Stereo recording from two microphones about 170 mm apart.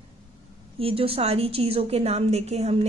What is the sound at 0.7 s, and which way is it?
A woman's voice, 35° right (ahead or behind).